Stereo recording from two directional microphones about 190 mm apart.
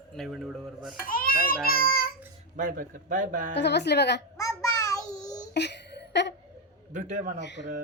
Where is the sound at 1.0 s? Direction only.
50° left (ahead or behind).